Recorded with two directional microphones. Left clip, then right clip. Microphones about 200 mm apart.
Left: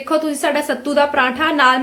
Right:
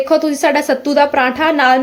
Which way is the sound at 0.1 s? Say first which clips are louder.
Right 2 dB; 20° right (ahead or behind).